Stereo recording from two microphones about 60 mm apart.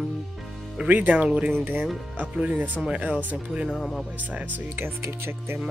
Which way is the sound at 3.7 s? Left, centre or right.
Centre.